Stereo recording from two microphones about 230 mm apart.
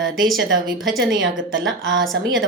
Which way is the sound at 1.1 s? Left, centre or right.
Right.